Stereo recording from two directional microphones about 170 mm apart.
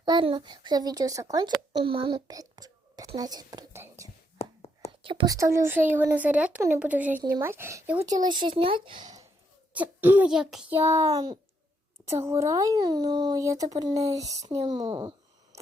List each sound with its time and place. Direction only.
0.0 s a child's voice: 30° right (ahead or behind)
4.4 s whispering: 35° left (ahead or behind)
4.9 s whispering: 30° right (ahead or behind)
5.3 s speech: 15° right (ahead or behind)
9.7 s speech: 10° right (ahead or behind)
10.8 s speech: 15° right (ahead or behind)